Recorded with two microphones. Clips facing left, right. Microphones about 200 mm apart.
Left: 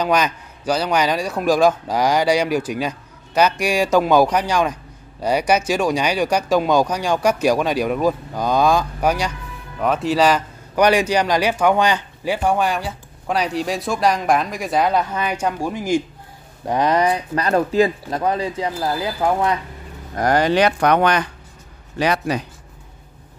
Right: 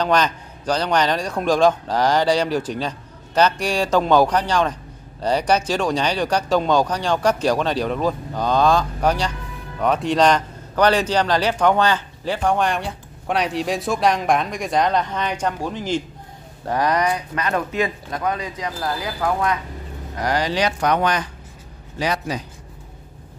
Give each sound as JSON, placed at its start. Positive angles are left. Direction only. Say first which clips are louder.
{"t": 0.0, "sound": "a man's voice", "louder": "even", "side_deg": 10}
{"t": 16.6, "sound": "speech", "louder": "left 3 dB", "side_deg": 20}
{"t": 20.2, "sound": "speech", "louder": "left 5 dB", "side_deg": 50}